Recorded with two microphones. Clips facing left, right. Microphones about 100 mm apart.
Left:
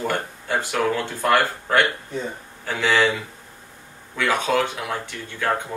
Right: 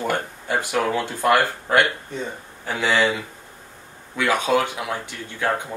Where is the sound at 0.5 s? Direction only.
15° right (ahead or behind).